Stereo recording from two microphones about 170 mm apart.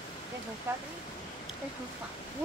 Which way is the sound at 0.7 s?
15° right (ahead or behind).